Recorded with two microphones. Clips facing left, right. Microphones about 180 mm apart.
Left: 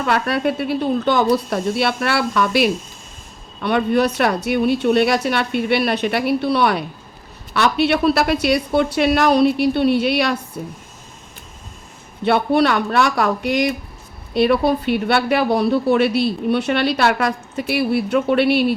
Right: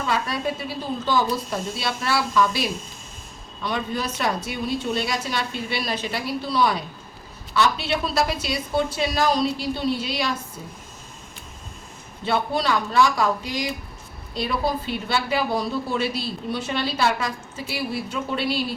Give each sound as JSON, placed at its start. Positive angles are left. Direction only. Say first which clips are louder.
{"t": 0.0, "sound": "a woman's voice", "louder": "left 6 dB", "side_deg": 65}
{"t": 12.2, "sound": "a woman's voice", "louder": "left 8 dB", "side_deg": 65}